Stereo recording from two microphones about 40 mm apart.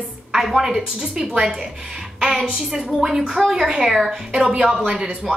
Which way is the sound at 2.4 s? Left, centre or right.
Centre.